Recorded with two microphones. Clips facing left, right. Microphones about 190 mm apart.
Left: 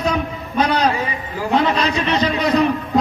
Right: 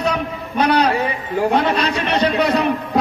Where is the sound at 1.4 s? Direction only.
60° right (ahead or behind).